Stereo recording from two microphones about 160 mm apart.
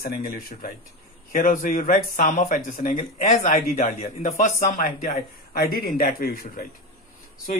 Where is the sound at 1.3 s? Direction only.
50° left (ahead or behind).